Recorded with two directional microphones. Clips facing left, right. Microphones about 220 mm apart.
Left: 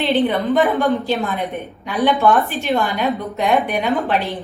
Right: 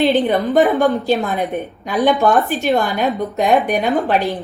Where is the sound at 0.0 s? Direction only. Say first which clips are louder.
Right 2 dB; 45° right (ahead or behind).